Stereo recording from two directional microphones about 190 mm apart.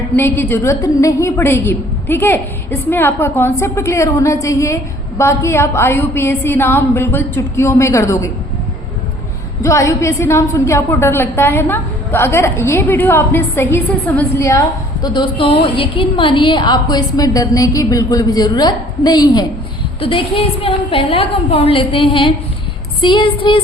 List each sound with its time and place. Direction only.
0.2 s a woman's voice: 10° left (ahead or behind)
9.6 s a woman's voice: 15° left (ahead or behind)
15.0 s a woman's voice: 25° left (ahead or behind)